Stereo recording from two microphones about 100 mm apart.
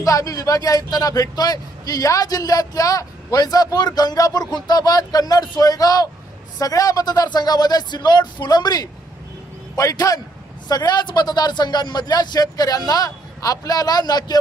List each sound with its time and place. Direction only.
0.0 s a man's voice: 35° left (ahead or behind)